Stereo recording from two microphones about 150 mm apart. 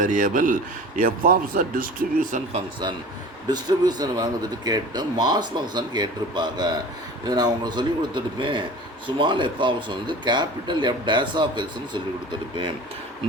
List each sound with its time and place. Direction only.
0.0 s a man's voice: 60° right (ahead or behind)
3.4 s speech: 25° right (ahead or behind)